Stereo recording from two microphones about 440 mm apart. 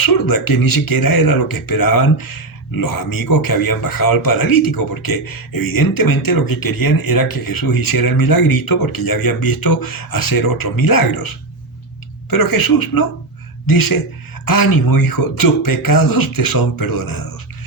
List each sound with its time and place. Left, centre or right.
0.0 s speech: left
12.3 s speech: left